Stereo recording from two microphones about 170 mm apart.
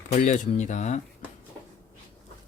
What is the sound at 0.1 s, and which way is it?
Speech, 45° left (ahead or behind).